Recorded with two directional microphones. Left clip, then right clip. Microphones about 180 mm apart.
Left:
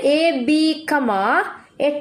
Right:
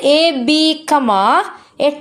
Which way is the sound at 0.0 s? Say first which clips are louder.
Right 5 dB; 40° right (ahead or behind).